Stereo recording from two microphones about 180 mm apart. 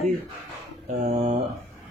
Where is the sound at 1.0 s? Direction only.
35° right (ahead or behind).